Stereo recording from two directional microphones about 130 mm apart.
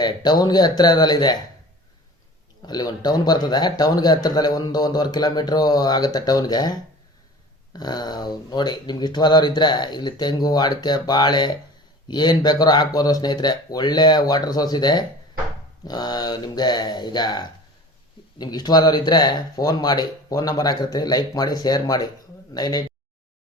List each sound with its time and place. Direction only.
0.0 s speech: 30° left (ahead or behind)
2.6 s speech: 30° left (ahead or behind)